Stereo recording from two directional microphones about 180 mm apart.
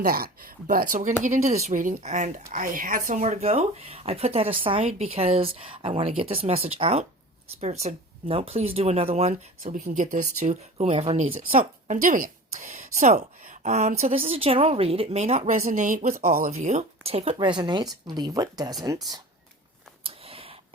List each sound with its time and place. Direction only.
0.0 s a woman's voice: 55° right (ahead or behind); by 9.7 s 35° right (ahead or behind)
9.7 s speech: 45° right (ahead or behind)
11.5 s a woman's voice: 50° right (ahead or behind)
16.5 s a woman's voice: 40° right (ahead or behind); by 19.0 s 20° right (ahead or behind)
20.1 s a sound: 30° right (ahead or behind)